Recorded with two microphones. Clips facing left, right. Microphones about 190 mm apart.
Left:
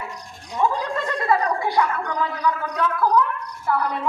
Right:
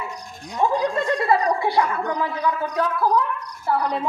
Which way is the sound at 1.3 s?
30° right (ahead or behind).